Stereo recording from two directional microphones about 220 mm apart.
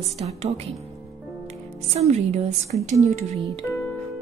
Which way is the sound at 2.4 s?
30° right (ahead or behind).